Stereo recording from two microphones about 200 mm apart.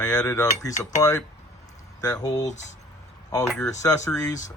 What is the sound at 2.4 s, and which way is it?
Speech, 35° left (ahead or behind).